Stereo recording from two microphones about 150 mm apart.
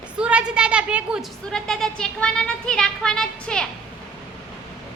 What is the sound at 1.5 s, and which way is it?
Speech, 5° left (ahead or behind).